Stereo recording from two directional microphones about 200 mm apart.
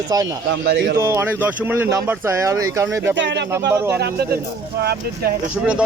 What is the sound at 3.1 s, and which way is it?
Speech, 60° right (ahead or behind).